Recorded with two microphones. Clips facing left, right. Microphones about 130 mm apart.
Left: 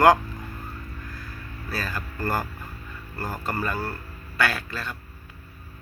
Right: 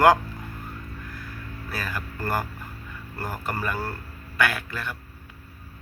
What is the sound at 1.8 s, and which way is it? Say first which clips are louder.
A man's voice: even; 15° right (ahead or behind).